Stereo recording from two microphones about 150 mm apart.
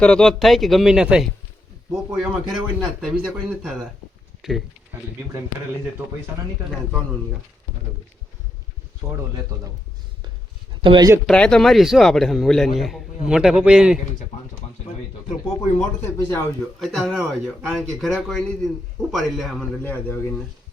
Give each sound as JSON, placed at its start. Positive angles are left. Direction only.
{"t": 0.0, "sound": "a man's voice", "side_deg": 5}
{"t": 9.0, "sound": "speech", "side_deg": -15}
{"t": 10.7, "sound": "a sound", "side_deg": -30}
{"t": 11.3, "sound": "a man's voice", "side_deg": 5}
{"t": 16.0, "sound": "a man's voice", "side_deg": 15}
{"t": 16.8, "sound": "a man's voice", "side_deg": 0}
{"t": 19.8, "sound": "a man's voice", "side_deg": 10}